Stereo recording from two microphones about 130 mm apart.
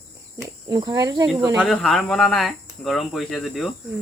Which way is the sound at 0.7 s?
35° right (ahead or behind).